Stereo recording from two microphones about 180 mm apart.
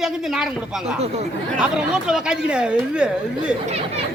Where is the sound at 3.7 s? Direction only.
35° right (ahead or behind).